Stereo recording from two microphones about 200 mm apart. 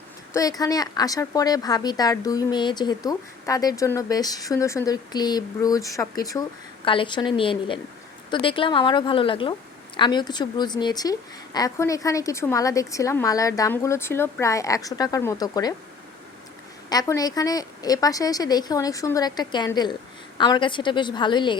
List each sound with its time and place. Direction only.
0.3 s a woman's voice: 20° left (ahead or behind)
16.9 s a woman's voice: 20° left (ahead or behind)